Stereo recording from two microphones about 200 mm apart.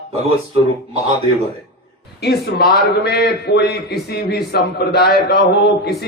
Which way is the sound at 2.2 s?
55° left (ahead or behind).